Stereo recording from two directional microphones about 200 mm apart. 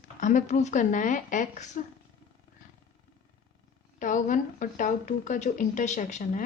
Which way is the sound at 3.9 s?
40° left (ahead or behind).